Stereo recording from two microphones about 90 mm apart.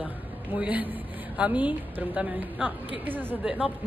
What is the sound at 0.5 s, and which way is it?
A woman's voice, 15° right (ahead or behind).